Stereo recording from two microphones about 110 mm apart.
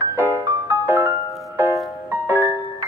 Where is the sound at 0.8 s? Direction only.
25° right (ahead or behind).